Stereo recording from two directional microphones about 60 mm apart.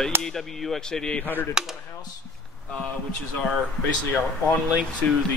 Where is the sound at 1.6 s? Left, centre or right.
Centre.